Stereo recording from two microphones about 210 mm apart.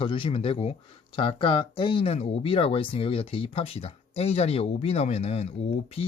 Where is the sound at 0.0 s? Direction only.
25° left (ahead or behind).